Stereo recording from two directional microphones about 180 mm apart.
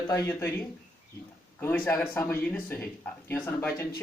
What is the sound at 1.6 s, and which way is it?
Speech, 10° left (ahead or behind).